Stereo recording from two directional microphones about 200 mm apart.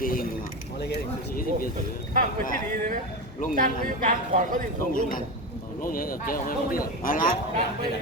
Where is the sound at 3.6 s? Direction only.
40° right (ahead or behind).